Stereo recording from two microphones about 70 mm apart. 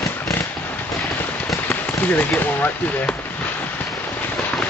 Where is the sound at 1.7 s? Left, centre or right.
Left.